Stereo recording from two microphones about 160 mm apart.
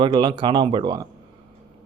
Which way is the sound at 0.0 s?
30° right (ahead or behind).